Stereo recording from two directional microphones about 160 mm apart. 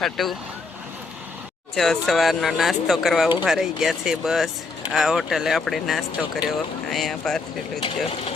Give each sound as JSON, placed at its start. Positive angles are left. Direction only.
{"t": 0.0, "sound": "speech", "side_deg": 0}
{"t": 1.7, "sound": "speech", "side_deg": 0}
{"t": 7.8, "sound": "speech", "side_deg": 35}